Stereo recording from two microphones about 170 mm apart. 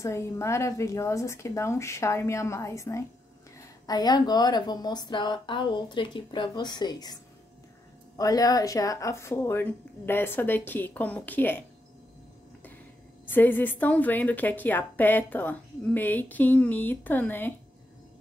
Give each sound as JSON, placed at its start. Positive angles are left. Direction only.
{"t": 0.0, "sound": "a woman's voice", "side_deg": 15}
{"t": 8.2, "sound": "a woman's voice", "side_deg": 20}
{"t": 13.3, "sound": "a woman's voice", "side_deg": 10}